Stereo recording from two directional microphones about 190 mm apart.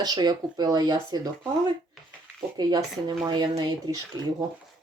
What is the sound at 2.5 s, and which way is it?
Speech, 20° right (ahead or behind).